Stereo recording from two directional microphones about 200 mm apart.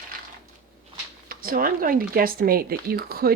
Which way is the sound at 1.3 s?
45° right (ahead or behind).